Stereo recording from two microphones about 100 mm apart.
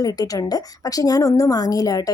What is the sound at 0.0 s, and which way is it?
A woman's voice, 40° left (ahead or behind).